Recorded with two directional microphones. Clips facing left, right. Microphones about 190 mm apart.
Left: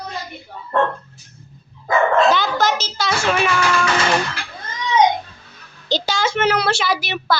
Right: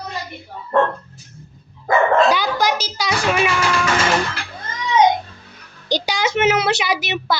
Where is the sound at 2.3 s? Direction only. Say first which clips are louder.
Even; 10° right (ahead or behind).